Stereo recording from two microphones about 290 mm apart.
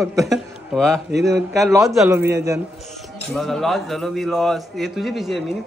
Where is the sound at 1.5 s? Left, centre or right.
Centre.